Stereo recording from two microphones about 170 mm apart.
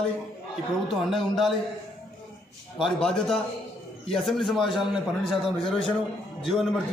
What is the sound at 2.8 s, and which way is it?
Speech, centre (ahead or behind).